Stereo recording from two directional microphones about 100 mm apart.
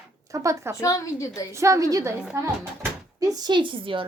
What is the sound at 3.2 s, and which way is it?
Speech, 40° right (ahead or behind).